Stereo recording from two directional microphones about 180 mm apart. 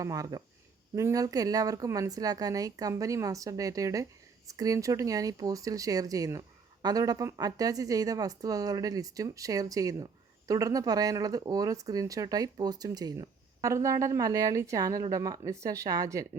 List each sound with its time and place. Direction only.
0.0 s a woman's voice: 20° right (ahead or behind)